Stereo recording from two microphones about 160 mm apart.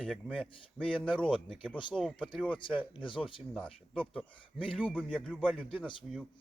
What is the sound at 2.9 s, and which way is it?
Speech, 30° left (ahead or behind).